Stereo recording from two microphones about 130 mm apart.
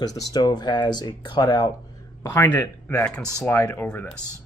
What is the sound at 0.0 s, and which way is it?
Speech, 30° left (ahead or behind).